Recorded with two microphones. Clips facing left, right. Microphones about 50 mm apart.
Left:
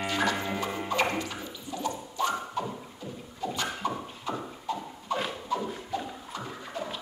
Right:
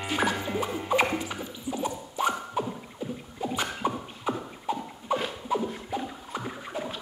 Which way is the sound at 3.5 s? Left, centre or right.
Centre.